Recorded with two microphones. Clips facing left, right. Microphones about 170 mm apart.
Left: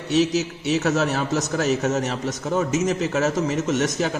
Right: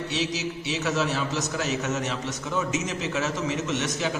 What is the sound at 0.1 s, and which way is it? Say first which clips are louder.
A man's voice: left 13 dB; 45° left (ahead or behind).